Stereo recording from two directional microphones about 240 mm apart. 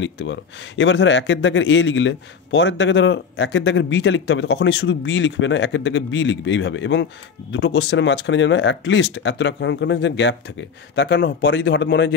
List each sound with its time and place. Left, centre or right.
0.0 s speech: left